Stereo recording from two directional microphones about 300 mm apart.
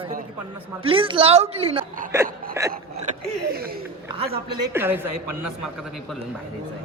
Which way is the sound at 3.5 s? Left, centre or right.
Right.